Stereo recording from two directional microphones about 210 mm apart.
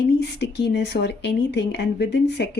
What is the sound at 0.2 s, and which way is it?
A woman's voice, 55° left (ahead or behind).